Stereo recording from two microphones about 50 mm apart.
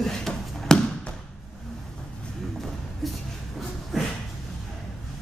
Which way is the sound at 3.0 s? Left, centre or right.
Centre.